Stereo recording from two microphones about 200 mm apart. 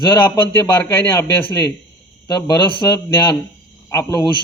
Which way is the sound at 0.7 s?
10° left (ahead or behind).